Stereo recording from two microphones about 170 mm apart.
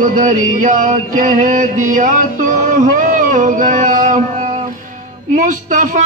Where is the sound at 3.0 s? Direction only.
50° right (ahead or behind).